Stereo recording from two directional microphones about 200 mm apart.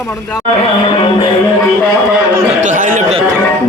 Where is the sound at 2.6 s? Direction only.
40° right (ahead or behind).